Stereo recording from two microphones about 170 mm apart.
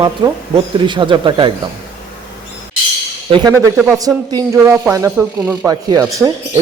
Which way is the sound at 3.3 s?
25° right (ahead or behind).